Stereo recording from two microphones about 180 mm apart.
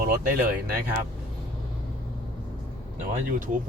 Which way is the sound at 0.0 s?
50° right (ahead or behind).